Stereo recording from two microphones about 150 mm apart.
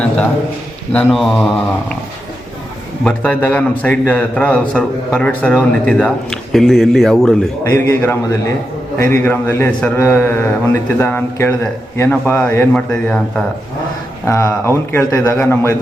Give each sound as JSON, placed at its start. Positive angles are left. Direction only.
{"t": 0.9, "sound": "speech", "side_deg": 0}
{"t": 3.0, "sound": "a man's voice", "side_deg": 10}
{"t": 7.6, "sound": "a man's voice", "side_deg": 15}
{"t": 14.3, "sound": "a man's voice", "side_deg": 20}